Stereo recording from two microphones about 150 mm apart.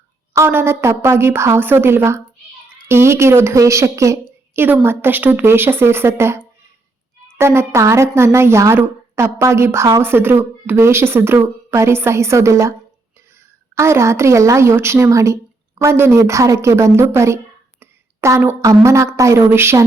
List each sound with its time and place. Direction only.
0.3 s a woman's voice: 15° right (ahead or behind)
13.7 s a woman's voice: 20° right (ahead or behind)